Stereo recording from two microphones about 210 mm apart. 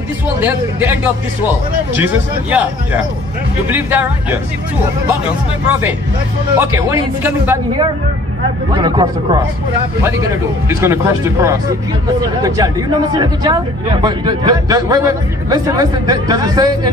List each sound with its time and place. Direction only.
0.4 s a man's voice: 10° right (ahead or behind)
5.7 s a man's voice: 10° right (ahead or behind)
8.7 s a man's voice: 20° right (ahead or behind)
10.8 s a man's voice: 10° right (ahead or behind)